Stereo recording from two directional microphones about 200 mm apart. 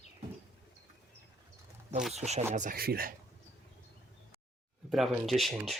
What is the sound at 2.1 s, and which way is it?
Speech, 35° right (ahead or behind).